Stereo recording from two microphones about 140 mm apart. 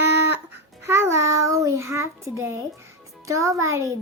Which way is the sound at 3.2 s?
25° right (ahead or behind).